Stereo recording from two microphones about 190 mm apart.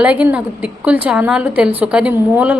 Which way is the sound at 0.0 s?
5° right (ahead or behind).